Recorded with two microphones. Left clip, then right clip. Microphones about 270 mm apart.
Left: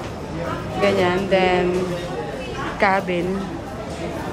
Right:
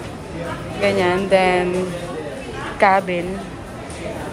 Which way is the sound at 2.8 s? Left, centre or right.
Centre.